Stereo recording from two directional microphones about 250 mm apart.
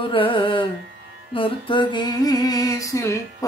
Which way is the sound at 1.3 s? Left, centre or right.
Left.